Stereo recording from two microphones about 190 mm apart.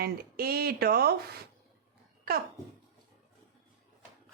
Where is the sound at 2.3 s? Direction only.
50° right (ahead or behind).